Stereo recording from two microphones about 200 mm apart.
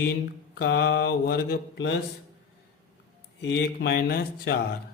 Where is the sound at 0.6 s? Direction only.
55° left (ahead or behind).